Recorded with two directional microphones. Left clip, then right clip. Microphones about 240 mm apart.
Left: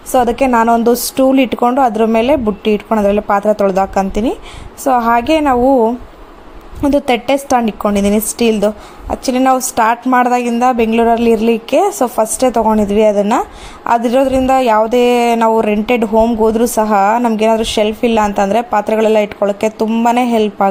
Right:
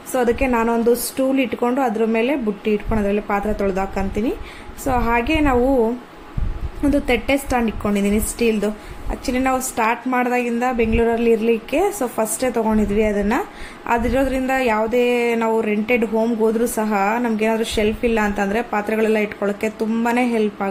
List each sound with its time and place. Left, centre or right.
0.1 s speech: left
6.8 s speech: left